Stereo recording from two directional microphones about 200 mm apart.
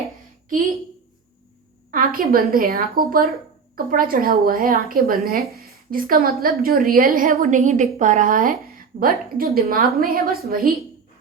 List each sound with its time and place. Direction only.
1.9 s a woman's voice: 45° right (ahead or behind)